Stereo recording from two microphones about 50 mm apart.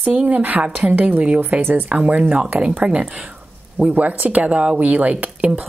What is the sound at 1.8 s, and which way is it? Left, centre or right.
Speech, right.